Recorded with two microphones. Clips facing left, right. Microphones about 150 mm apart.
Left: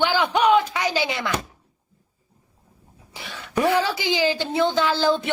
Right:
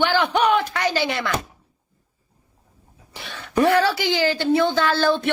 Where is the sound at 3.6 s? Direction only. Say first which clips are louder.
Right 3 dB; 15° left (ahead or behind).